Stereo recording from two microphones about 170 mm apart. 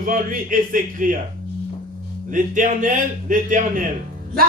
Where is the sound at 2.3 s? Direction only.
50° right (ahead or behind).